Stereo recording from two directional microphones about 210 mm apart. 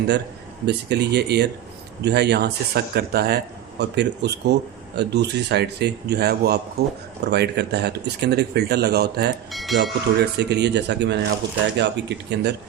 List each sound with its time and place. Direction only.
0.6 s speech: 50° right (ahead or behind)
9.5 s speech: centre (ahead or behind)
10.2 s speech: 50° right (ahead or behind)